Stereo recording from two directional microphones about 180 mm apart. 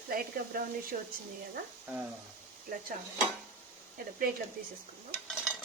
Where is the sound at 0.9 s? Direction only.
50° right (ahead or behind).